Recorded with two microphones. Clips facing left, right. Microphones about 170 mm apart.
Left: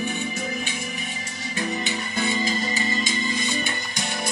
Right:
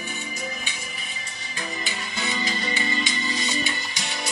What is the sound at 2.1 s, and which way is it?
Music, 50° left (ahead or behind).